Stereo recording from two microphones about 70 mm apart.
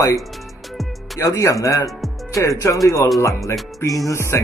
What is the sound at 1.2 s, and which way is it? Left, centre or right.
Speech, left.